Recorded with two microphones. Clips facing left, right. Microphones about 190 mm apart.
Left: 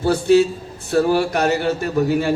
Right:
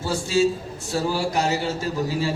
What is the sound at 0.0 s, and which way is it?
A man's voice, 60° left (ahead or behind).